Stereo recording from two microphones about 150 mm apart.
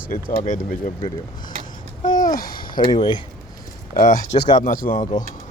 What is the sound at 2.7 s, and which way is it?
Speech, 30° left (ahead or behind).